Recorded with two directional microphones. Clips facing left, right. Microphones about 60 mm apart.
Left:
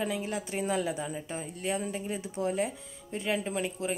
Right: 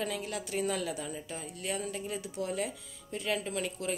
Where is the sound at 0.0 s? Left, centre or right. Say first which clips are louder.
Left 3 dB; left.